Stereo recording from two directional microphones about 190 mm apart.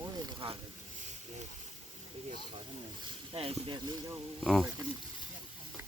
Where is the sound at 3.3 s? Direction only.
30° right (ahead or behind).